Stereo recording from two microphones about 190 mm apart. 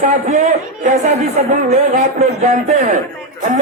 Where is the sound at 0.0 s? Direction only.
40° right (ahead or behind).